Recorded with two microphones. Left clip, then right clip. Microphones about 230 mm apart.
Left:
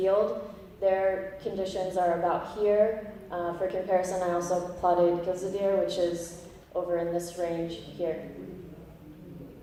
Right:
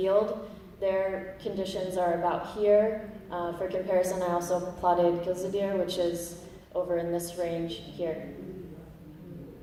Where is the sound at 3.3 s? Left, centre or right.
Right.